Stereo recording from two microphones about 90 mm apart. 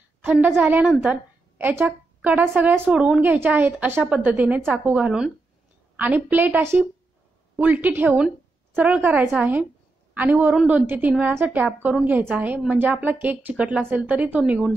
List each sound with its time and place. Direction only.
0.2 s a woman's voice: 20° right (ahead or behind)
2.9 s a woman's voice: 10° right (ahead or behind)
3.2 s a woman's voice: 20° right (ahead or behind)
5.9 s a woman's voice: 20° right (ahead or behind)